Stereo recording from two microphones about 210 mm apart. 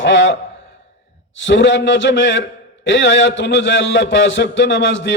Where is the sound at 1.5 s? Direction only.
60° left (ahead or behind).